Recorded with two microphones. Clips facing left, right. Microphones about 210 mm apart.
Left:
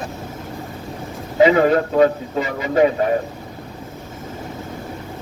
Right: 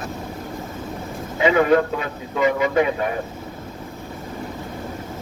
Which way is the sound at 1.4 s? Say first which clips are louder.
Left 3 dB; 35° left (ahead or behind).